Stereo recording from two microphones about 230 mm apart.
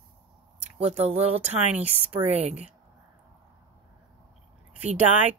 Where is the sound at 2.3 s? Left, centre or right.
Right.